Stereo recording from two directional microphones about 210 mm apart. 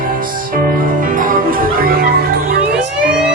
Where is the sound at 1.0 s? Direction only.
40° right (ahead or behind).